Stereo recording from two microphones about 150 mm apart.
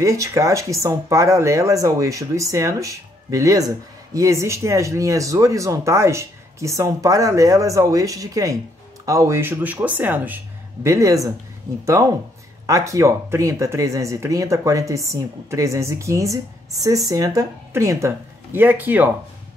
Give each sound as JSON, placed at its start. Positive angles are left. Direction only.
{"t": 0.0, "sound": "speech", "side_deg": -20}